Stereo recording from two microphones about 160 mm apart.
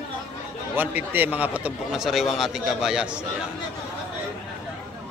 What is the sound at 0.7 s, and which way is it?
A man's voice, 10° right (ahead or behind).